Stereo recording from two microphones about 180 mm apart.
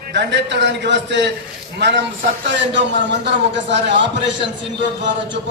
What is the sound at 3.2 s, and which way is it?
Speech, 75° right (ahead or behind).